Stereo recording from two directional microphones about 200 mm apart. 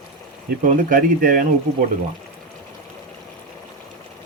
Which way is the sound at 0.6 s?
40° right (ahead or behind).